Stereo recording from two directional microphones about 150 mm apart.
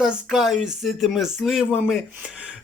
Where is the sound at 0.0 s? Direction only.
5° right (ahead or behind).